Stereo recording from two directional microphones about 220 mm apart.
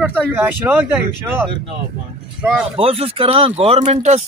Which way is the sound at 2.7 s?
25° right (ahead or behind).